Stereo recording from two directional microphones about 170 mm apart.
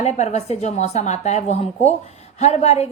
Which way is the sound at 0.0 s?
40° left (ahead or behind).